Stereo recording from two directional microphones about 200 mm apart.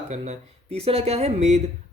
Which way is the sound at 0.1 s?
30° right (ahead or behind).